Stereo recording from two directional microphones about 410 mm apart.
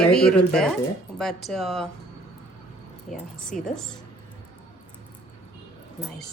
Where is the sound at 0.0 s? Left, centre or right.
Centre.